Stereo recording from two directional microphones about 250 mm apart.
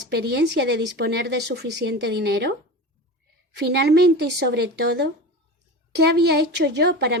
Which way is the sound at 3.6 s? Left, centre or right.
Right.